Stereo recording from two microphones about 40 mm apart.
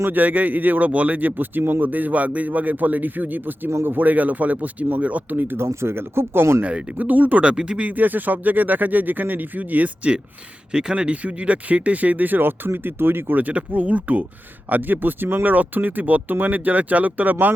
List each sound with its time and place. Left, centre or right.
0.1 s a man's voice: right
5.5 s speech: right
6.7 s speech: right
6.9 s a man's voice: right
7.4 s speech: right
7.8 s a man's voice: right
10.7 s speech: right
13.7 s speech: right
14.7 s a man's voice: right